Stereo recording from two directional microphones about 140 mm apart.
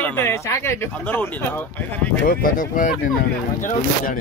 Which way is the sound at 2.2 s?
90° left.